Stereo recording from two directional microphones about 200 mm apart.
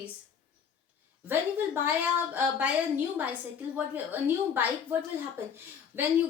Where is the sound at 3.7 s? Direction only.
10° right (ahead or behind).